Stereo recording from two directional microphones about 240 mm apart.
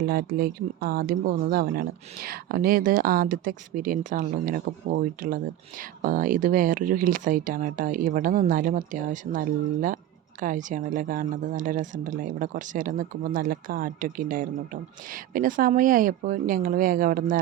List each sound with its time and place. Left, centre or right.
0.0 s speech: right